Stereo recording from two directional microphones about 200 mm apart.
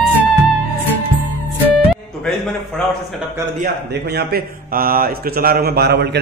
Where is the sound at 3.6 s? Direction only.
55° right (ahead or behind).